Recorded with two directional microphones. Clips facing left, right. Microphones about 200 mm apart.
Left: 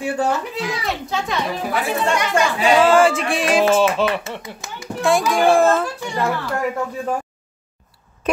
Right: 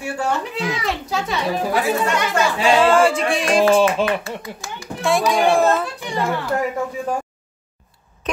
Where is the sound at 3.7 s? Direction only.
15° right (ahead or behind).